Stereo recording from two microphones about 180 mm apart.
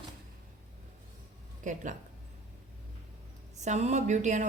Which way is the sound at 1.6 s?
45° right (ahead or behind).